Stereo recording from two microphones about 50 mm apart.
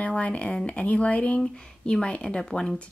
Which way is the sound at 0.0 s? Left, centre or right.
Left.